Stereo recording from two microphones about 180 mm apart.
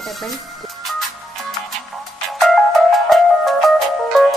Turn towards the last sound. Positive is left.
turn(degrees=0)  # may be behind; listen again after turning